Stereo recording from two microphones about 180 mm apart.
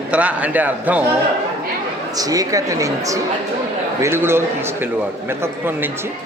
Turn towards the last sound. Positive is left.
turn(degrees=-15)  # may be behind; listen again after turning